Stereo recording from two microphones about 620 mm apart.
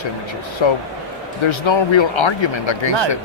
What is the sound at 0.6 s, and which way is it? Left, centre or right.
A man's voice, left.